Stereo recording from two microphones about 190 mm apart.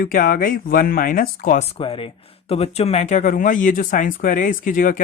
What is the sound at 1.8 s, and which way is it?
Speech, 30° left (ahead or behind).